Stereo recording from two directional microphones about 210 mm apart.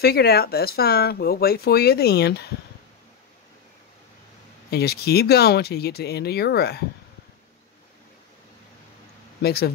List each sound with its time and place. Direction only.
0.0 s speech: 50° left (ahead or behind)
4.6 s speech: 50° left (ahead or behind)
9.4 s speech: 50° left (ahead or behind)